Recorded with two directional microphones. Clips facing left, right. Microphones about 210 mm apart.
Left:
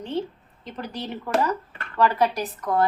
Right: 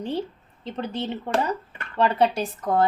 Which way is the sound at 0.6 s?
25° right (ahead or behind).